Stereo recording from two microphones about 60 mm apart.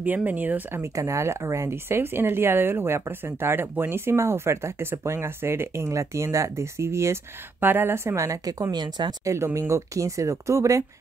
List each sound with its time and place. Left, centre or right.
0.0 s speech: right
0.7 s speech: right
7.6 s speech: right
9.2 s speech: right